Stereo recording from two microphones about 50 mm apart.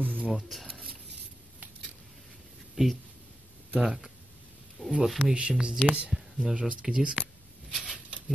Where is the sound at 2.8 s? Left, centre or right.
Centre.